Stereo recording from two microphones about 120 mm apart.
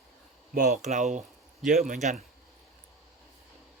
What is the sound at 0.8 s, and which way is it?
Speech, 75° right (ahead or behind).